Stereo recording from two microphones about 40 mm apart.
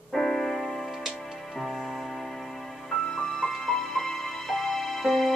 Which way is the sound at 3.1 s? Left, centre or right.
Centre.